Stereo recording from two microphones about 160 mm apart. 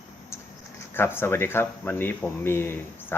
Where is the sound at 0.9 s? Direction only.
15° left (ahead or behind).